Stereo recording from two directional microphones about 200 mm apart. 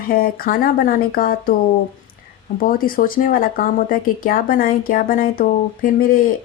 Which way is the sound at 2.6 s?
45° left (ahead or behind).